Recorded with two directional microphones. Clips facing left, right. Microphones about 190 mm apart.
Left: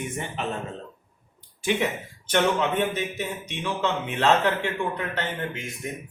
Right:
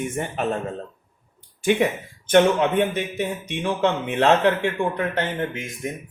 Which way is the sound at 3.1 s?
55° right (ahead or behind).